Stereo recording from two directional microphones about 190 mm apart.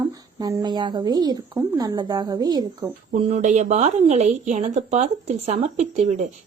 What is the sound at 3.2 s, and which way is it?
Speech, 40° right (ahead or behind).